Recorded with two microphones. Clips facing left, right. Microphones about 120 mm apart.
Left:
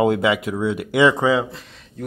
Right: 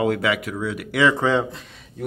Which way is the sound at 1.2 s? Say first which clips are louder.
Left 2 dB; centre (ahead or behind).